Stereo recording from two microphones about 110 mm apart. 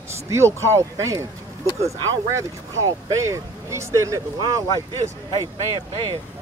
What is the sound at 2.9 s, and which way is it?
Speech, 30° right (ahead or behind).